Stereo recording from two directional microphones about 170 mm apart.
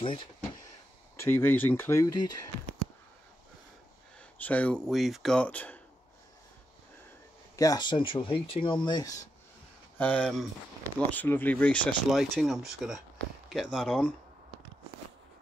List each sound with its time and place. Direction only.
0.0 s speech: 30° left (ahead or behind)
1.2 s speech: 15° left (ahead or behind)
4.4 s speech: 10° left (ahead or behind)
7.5 s speech: 20° left (ahead or behind)
9.9 s speech: 10° left (ahead or behind)